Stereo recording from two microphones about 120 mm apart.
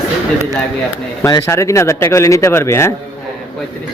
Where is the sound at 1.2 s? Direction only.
25° left (ahead or behind).